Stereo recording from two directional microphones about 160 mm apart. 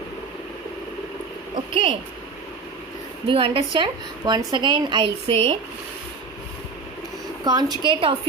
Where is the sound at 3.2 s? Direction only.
35° right (ahead or behind).